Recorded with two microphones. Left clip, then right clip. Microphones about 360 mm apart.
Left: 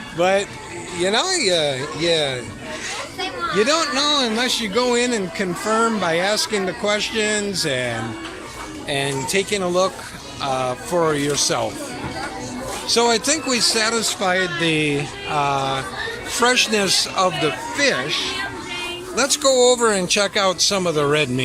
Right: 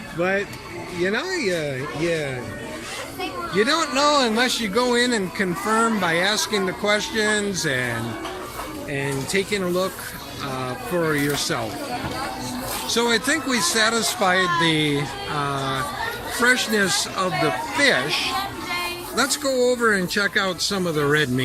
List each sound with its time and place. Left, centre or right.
0.2 s speech: centre
1.4 s speech: left
3.7 s speech: centre
12.9 s speech: centre